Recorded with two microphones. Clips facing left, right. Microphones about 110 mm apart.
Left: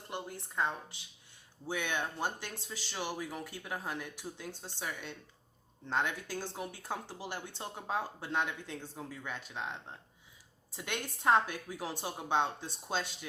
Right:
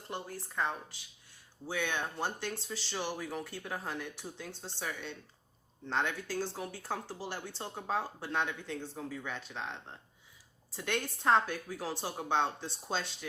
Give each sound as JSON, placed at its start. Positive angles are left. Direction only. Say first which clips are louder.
{"t": 0.1, "sound": "a woman's voice", "louder": "right 1 dB", "side_deg": 20}
{"t": 10.7, "sound": "speech", "louder": "right 4 dB", "side_deg": 15}